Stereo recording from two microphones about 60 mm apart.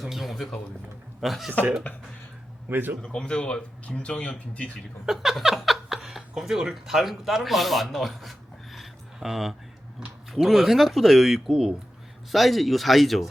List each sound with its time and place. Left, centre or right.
0.0 s speech: centre
1.9 s speech: left
2.6 s a man's voice: right
3.0 s speech: centre
5.0 s speech: centre